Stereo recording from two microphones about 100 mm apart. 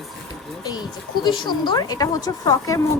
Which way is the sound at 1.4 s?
50° left (ahead or behind).